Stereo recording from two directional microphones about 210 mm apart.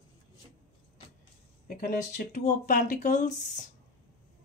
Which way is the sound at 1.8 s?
35° left (ahead or behind).